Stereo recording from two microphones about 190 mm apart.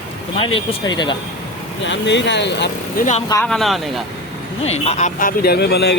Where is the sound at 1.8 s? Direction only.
70° left (ahead or behind).